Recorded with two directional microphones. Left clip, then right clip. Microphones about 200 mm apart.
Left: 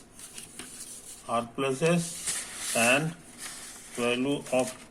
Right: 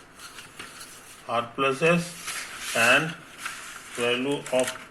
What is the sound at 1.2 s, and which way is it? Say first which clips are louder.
Speech: right 4 dB; 20° left (ahead or behind).